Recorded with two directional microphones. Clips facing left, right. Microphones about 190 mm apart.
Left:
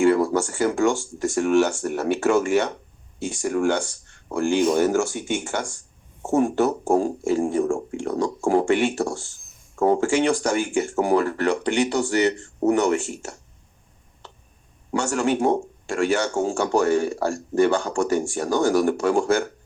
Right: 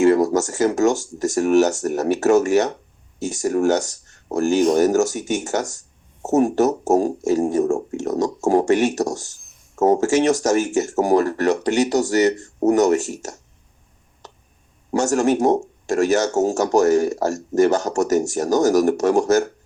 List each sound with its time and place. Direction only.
0.0 s speech: 40° right (ahead or behind)
14.9 s speech: 40° right (ahead or behind)